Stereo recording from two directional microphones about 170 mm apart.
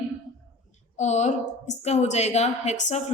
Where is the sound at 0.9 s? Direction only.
45° left (ahead or behind).